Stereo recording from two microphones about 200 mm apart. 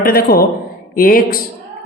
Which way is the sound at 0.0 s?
50° left (ahead or behind).